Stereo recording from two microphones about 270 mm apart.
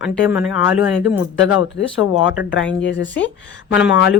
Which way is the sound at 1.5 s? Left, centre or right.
Left.